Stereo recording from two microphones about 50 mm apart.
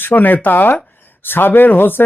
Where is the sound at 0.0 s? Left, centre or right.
Left.